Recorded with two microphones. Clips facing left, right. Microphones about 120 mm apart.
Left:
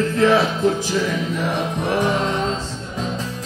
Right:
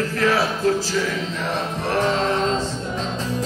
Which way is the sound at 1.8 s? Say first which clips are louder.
Left 1 dB; 15° left (ahead or behind).